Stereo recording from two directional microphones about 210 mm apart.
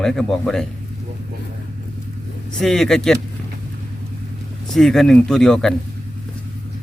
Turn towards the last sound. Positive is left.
turn(degrees=0)  # may be behind; listen again after turning